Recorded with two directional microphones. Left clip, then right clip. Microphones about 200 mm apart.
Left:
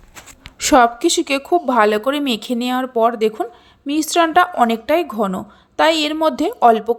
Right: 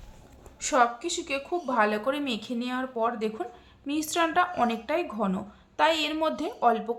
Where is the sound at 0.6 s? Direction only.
40° left (ahead or behind).